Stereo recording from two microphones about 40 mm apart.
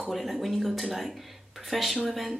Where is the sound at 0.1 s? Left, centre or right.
Centre.